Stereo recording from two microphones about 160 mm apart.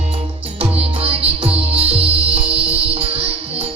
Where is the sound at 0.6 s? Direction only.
35° right (ahead or behind).